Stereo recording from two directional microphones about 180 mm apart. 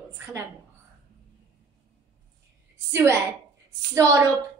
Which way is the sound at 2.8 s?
15° right (ahead or behind).